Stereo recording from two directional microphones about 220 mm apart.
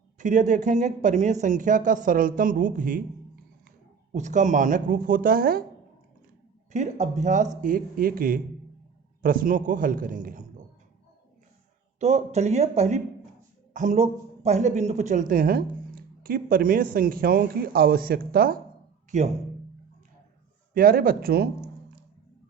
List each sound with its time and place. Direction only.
0.2 s speech: 35° right (ahead or behind)
4.1 s speech: 35° right (ahead or behind)
6.7 s speech: 30° right (ahead or behind)
11.9 s speech: 30° right (ahead or behind)
20.7 s speech: 40° right (ahead or behind)